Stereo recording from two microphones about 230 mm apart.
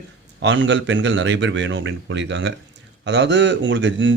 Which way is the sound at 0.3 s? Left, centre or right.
Right.